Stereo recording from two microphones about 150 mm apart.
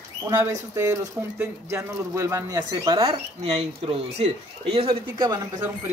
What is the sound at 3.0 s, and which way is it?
Speech, 40° right (ahead or behind).